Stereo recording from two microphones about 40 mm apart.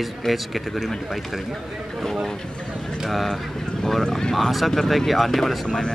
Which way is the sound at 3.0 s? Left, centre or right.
Centre.